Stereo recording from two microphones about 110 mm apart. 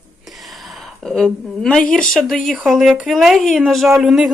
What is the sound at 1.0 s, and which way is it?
Speech, 5° left (ahead or behind).